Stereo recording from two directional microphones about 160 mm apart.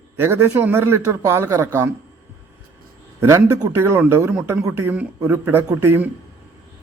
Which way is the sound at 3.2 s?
15° right (ahead or behind).